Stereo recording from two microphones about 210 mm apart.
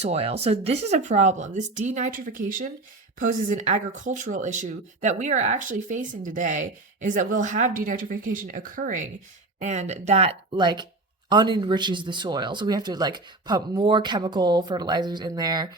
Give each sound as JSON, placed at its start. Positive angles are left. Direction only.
{"t": 0.0, "sound": "speech", "side_deg": -30}